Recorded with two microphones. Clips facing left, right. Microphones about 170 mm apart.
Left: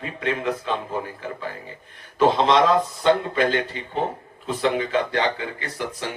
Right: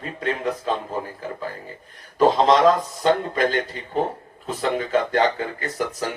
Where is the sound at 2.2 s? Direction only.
40° right (ahead or behind).